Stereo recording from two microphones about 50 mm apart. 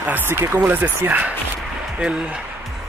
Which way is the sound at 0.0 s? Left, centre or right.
Right.